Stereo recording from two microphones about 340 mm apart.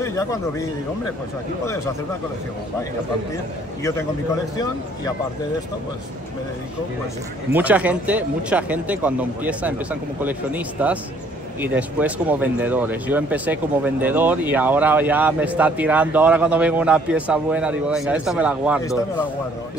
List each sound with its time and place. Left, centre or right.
0.0 s a man's voice: centre
7.5 s speech: centre